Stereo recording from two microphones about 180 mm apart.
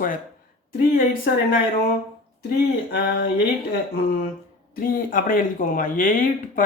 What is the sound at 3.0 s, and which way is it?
Speech, 55° left (ahead or behind).